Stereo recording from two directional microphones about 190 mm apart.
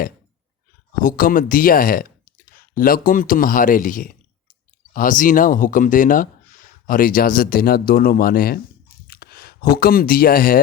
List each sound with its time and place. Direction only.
1.0 s speech: 45° left (ahead or behind)